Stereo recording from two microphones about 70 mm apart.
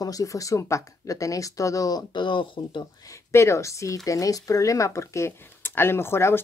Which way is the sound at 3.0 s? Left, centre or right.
Left.